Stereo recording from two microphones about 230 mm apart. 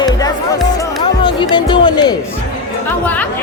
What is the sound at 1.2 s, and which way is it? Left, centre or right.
Music, centre.